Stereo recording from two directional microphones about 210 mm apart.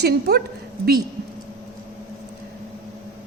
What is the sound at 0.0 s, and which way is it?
Speech, 50° right (ahead or behind).